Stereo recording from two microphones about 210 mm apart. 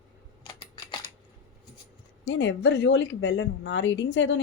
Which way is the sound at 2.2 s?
60° left (ahead or behind).